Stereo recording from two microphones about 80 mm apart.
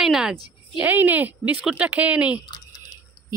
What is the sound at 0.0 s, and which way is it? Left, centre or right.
Speech, centre.